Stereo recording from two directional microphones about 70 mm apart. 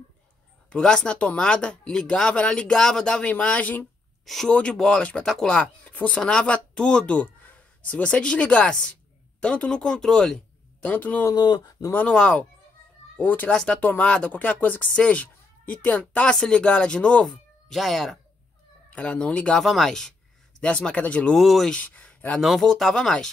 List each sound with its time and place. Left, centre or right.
0.7 s speech: centre
5.5 s speech: centre
10.8 s a man's voice: left
11.3 s speech: left
12.1 s a man's voice: centre
13.5 s speech: centre
13.7 s speech: left
17.3 s speech: centre
18.9 s speech: centre
19.6 s speech: centre
21.3 s speech: centre
21.8 s a sound: left
22.4 s speech: centre